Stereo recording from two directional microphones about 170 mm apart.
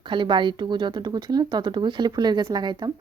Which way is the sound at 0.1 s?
30° right (ahead or behind).